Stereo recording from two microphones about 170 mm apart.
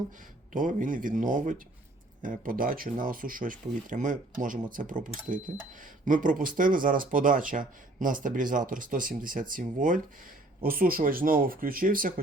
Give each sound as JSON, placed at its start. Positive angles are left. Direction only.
{"t": 0.5, "sound": "speech", "side_deg": -50}